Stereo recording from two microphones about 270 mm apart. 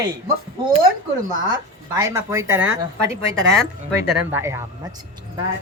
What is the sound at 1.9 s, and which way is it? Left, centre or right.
Speech, centre.